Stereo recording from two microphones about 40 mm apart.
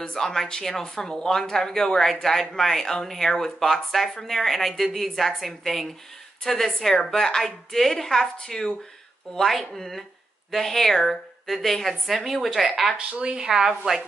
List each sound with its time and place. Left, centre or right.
0.1 s a woman's voice: centre
13.2 s speech: right
13.5 s a woman's voice: centre